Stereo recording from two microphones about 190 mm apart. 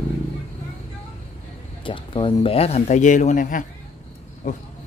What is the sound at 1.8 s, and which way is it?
Speech, 25° left (ahead or behind).